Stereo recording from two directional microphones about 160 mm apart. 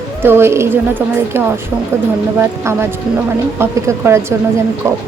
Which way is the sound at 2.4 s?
15° right (ahead or behind).